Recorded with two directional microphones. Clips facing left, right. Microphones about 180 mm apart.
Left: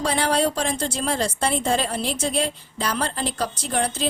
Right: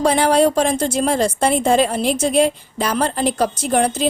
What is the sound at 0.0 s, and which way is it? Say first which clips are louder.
A woman's voice: right 7 dB; 45° right (ahead or behind).